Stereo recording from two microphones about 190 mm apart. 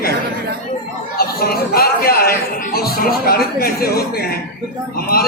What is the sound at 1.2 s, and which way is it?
A man's voice, 55° left (ahead or behind).